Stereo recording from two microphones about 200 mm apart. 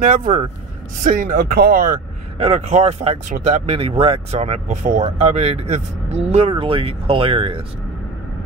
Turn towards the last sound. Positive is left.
turn(degrees=-25)  # may be behind; listen again after turning